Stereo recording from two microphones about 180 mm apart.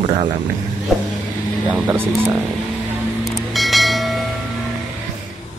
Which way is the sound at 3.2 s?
Centre (ahead or behind).